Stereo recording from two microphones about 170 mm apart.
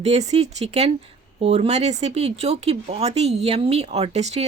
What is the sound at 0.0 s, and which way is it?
Speech, 40° right (ahead or behind).